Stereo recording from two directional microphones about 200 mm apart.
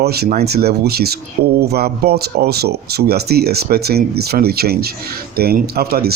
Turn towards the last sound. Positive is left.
turn(degrees=-50)  # may be behind; listen again after turning